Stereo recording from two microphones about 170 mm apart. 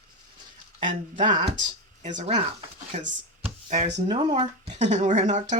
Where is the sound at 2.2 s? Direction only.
35° right (ahead or behind).